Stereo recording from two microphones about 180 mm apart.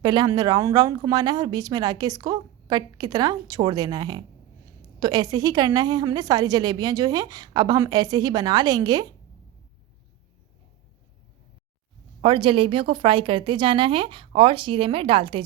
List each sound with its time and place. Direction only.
0.0 s speech: 25° right (ahead or behind)
12.2 s speech: 30° right (ahead or behind)